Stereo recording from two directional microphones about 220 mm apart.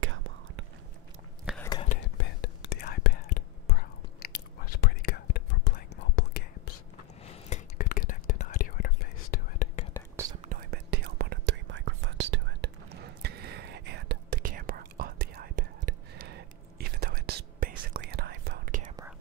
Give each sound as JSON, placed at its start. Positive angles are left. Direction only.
{"t": 0.0, "sound": "whispering", "side_deg": -60}
{"t": 1.6, "sound": "whispering", "side_deg": 20}
{"t": 2.1, "sound": "whispering", "side_deg": 50}
{"t": 7.4, "sound": "whispering", "side_deg": 35}
{"t": 10.4, "sound": "whispering", "side_deg": -40}